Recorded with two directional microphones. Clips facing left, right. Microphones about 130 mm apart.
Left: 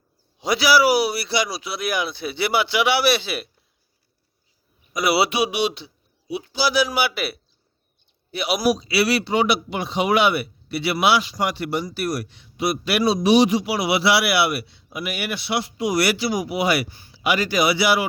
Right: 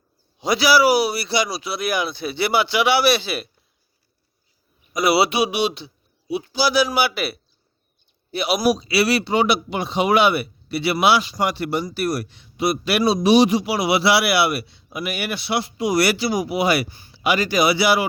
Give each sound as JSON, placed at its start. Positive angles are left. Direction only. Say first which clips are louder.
{"t": 0.3, "sound": "speech", "louder": "right 1 dB", "side_deg": -25}
{"t": 5.0, "sound": "a man's voice", "louder": "right 2 dB", "side_deg": -30}